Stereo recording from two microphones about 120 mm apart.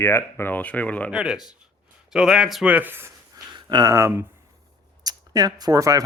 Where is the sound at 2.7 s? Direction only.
15° right (ahead or behind).